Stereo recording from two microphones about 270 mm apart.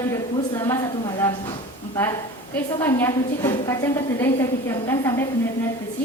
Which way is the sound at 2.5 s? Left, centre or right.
Centre.